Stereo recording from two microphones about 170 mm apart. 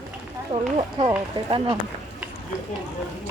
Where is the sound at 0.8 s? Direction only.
30° right (ahead or behind).